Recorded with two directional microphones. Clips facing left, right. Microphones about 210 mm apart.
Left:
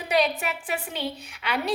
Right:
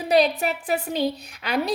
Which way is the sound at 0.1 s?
35° right (ahead or behind).